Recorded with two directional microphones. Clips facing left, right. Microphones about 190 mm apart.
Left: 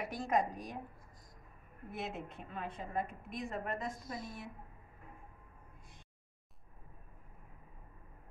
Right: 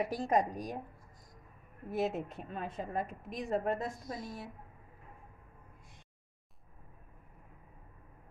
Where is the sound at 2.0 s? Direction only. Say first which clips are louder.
Right 9 dB; 40° right (ahead or behind).